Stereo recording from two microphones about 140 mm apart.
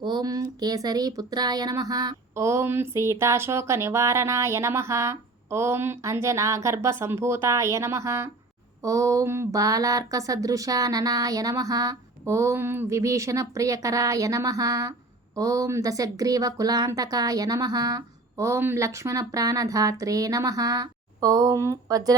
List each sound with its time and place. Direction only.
0.0 s speech: 30° right (ahead or behind)